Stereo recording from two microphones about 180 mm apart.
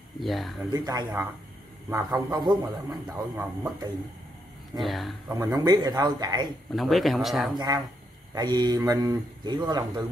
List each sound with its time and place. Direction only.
0.2 s speech: centre (ahead or behind)
0.7 s a man's voice: 20° right (ahead or behind)
2.9 s speech: 5° right (ahead or behind)
4.8 s speech: centre (ahead or behind)
5.3 s a man's voice: 20° right (ahead or behind)
6.7 s speech: centre (ahead or behind)
7.5 s a man's voice: 20° right (ahead or behind)